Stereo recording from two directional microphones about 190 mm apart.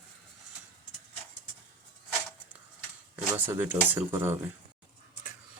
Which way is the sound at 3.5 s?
10° right (ahead or behind).